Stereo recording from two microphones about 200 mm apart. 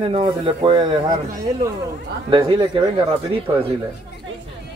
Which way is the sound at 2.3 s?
25° right (ahead or behind).